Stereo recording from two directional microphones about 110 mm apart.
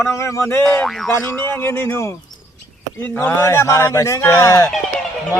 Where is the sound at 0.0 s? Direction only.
25° left (ahead or behind).